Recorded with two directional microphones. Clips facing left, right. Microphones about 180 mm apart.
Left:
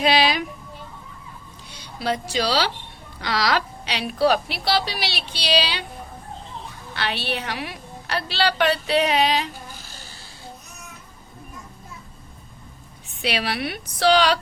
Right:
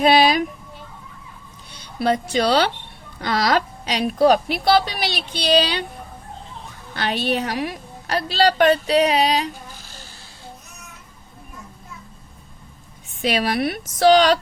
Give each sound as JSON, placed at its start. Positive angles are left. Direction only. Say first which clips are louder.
{"t": 0.0, "sound": "a woman's voice", "louder": "right 5 dB", "side_deg": -50}
{"t": 1.7, "sound": "a woman's voice", "louder": "right 5 dB", "side_deg": -55}
{"t": 6.9, "sound": "a woman's voice", "louder": "right 5 dB", "side_deg": -45}
{"t": 13.2, "sound": "a woman's voice", "louder": "right 5 dB", "side_deg": -45}